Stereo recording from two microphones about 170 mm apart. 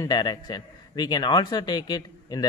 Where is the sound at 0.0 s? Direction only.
25° left (ahead or behind).